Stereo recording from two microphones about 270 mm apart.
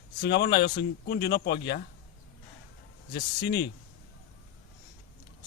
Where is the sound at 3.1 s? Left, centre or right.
Left.